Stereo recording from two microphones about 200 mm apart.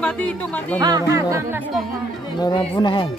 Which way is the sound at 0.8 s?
20° right (ahead or behind).